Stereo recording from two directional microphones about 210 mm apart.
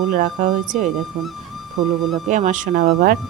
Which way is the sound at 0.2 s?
40° right (ahead or behind).